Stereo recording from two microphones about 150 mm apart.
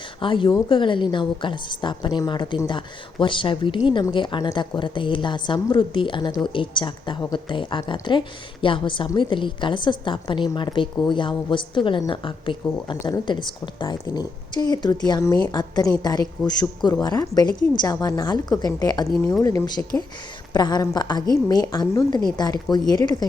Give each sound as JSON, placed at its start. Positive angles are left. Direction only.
{"t": 0.2, "sound": "a woman's voice", "side_deg": 35}